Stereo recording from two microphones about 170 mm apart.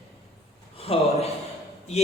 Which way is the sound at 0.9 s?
35° left (ahead or behind).